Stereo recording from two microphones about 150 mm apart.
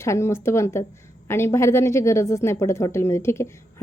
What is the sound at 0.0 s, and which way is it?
A woman's voice, 20° left (ahead or behind).